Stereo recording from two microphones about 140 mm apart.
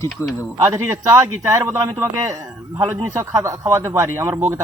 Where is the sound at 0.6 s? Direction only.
20° right (ahead or behind).